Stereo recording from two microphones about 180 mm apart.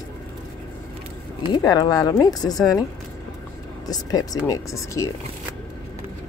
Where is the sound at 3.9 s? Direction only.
20° left (ahead or behind).